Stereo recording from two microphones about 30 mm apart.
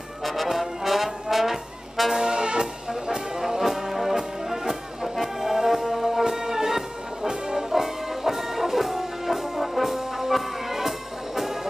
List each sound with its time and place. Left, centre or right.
0.2 s brass instrument: centre
2.1 s brass instrument: centre
3.3 s brass instrument: centre
4.5 s music: centre
7.2 s brass instrument: right
7.7 s music: centre